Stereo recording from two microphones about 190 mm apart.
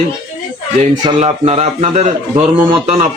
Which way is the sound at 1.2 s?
35° right (ahead or behind).